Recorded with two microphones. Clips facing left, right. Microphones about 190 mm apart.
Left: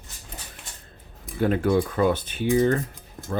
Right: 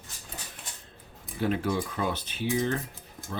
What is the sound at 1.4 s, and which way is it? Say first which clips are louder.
Speech: left 7 dB; 50° left (ahead or behind).